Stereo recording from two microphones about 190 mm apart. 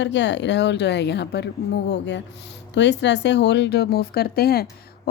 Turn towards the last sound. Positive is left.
turn(degrees=55)  # may be behind; listen again after turning